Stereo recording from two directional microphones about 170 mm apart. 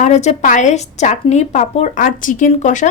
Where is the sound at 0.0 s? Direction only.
45° left (ahead or behind).